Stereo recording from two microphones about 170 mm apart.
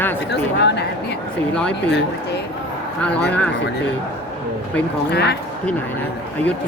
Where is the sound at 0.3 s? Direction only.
85° left.